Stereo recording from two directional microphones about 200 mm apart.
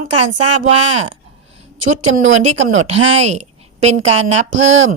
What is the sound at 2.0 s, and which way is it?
Speech, 75° right (ahead or behind).